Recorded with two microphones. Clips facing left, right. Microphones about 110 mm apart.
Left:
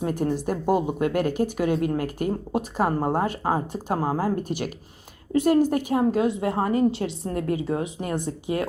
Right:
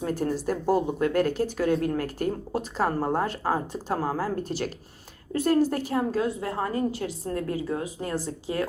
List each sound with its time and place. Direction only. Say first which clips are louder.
0.0 s speech: left 2 dB; 15° left (ahead or behind)